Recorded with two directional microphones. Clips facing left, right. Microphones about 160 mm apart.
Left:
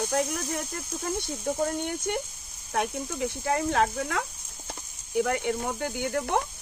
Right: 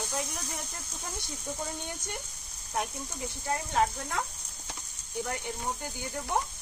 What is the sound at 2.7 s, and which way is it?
Speech, 85° left.